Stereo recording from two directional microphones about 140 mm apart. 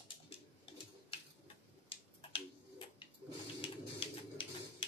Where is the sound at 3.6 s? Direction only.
40° left (ahead or behind).